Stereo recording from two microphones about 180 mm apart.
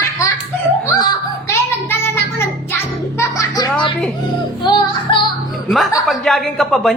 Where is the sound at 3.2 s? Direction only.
20° left (ahead or behind).